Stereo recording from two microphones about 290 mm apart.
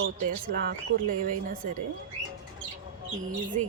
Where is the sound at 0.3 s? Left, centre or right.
Right.